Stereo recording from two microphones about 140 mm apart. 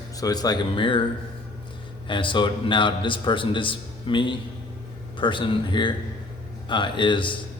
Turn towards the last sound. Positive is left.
turn(degrees=35)  # may be behind; listen again after turning